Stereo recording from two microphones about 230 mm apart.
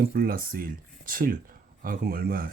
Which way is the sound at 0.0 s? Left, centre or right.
Right.